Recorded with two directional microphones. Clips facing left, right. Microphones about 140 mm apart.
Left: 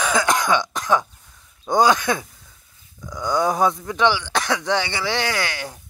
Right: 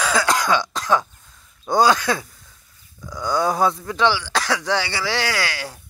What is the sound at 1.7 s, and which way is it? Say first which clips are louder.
Speech: even; 20° left (ahead or behind).